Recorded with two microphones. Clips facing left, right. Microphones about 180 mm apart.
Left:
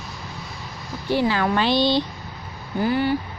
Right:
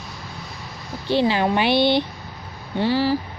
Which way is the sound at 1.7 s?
60° right (ahead or behind).